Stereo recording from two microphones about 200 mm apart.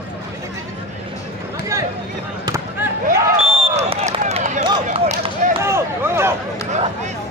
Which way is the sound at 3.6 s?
30° right (ahead or behind).